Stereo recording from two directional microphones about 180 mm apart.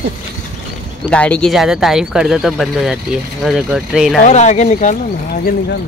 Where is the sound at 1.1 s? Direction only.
5° left (ahead or behind).